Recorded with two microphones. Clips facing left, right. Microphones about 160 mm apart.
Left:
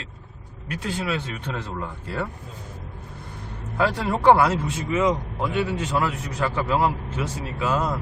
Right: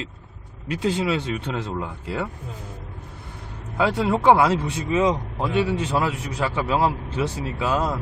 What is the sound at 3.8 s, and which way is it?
Speech, 20° right (ahead or behind).